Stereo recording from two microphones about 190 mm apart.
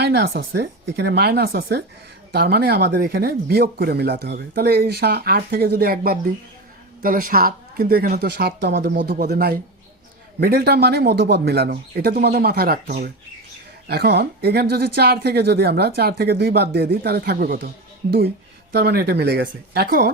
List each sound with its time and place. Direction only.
0.0 s speech: 60° right (ahead or behind)
18.7 s speech: 60° right (ahead or behind)